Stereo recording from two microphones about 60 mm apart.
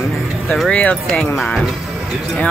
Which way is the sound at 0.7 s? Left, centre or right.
Left.